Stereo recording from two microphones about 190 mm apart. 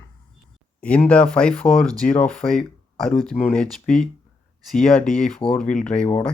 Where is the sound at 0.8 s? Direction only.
5° left (ahead or behind).